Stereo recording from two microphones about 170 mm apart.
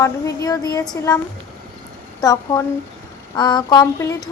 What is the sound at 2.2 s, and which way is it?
A woman's voice, 20° left (ahead or behind).